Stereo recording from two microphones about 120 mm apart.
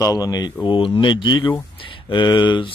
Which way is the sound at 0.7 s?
45° left (ahead or behind).